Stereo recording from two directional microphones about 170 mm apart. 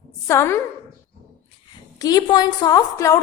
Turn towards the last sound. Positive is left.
turn(degrees=20)  # may be behind; listen again after turning